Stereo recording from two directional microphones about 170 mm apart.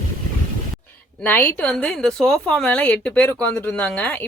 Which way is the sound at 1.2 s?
10° left (ahead or behind).